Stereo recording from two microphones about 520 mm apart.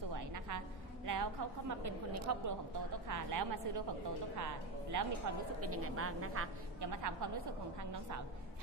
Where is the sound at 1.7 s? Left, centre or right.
Right.